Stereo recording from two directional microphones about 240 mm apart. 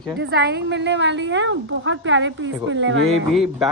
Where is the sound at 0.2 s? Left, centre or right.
Right.